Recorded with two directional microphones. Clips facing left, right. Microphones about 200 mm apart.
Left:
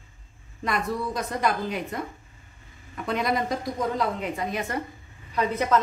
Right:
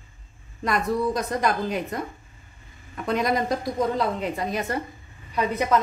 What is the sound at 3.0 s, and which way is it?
A woman's voice, 40° right (ahead or behind).